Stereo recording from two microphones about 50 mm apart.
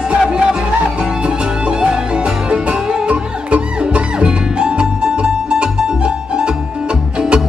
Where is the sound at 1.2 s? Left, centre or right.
Centre.